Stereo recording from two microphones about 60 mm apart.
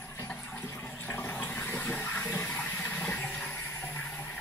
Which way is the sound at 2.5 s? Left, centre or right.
Centre.